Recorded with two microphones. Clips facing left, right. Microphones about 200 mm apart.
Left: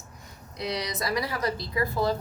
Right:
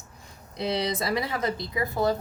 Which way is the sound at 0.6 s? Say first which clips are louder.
Right 4 dB; 25° right (ahead or behind).